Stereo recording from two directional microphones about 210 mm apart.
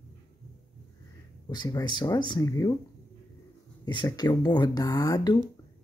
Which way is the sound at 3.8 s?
20° left (ahead or behind).